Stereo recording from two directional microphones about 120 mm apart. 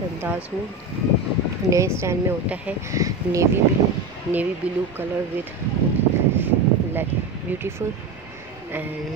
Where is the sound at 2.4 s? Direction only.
10° right (ahead or behind).